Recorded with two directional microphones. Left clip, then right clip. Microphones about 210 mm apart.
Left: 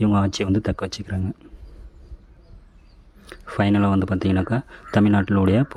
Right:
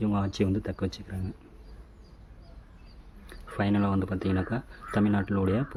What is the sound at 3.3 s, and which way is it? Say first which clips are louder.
Speech: left 8 dB; 30° left (ahead or behind).